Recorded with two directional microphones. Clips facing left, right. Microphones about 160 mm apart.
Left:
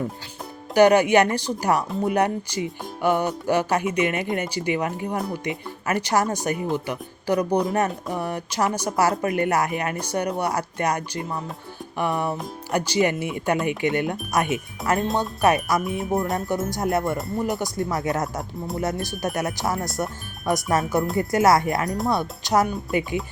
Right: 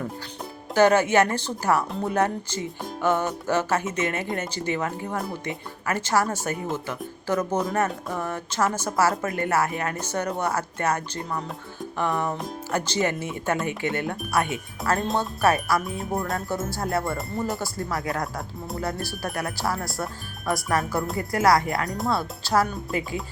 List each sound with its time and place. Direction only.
0.7 s speech: 15° left (ahead or behind)
14.8 s speech: centre (ahead or behind)
15.2 s speech: 15° left (ahead or behind)